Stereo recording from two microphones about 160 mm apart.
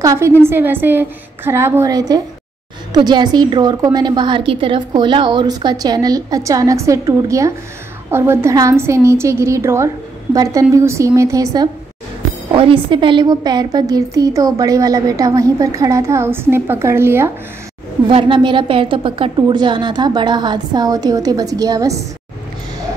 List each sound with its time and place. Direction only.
0.0 s a woman's voice: 20° right (ahead or behind)
18.0 s a woman's voice: 30° right (ahead or behind)